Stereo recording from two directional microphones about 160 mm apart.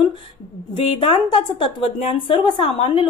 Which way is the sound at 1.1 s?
35° left (ahead or behind).